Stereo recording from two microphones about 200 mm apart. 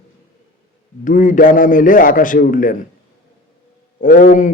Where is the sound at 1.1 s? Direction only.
40° left (ahead or behind).